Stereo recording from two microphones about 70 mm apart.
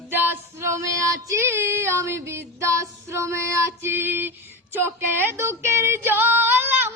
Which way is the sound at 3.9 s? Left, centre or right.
Right.